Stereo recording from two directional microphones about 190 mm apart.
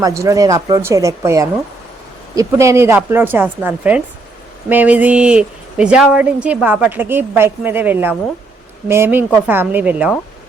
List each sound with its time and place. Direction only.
0.0 s speech: 15° right (ahead or behind)